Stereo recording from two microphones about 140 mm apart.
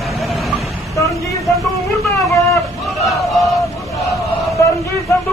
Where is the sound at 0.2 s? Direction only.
Centre (ahead or behind).